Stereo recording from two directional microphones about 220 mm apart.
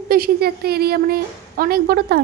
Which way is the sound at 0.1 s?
45° right (ahead or behind).